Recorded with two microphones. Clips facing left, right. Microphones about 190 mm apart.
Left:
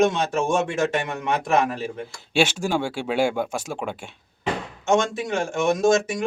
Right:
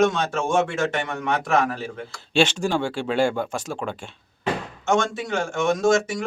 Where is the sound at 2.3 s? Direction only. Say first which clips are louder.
Right 1 dB; 10° left (ahead or behind).